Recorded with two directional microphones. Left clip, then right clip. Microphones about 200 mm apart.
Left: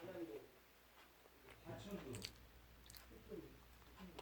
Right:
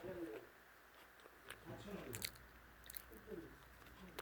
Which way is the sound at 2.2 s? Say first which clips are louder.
Right 5 dB; 30° right (ahead or behind).